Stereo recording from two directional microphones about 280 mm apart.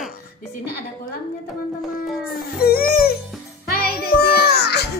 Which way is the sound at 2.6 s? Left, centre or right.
Left.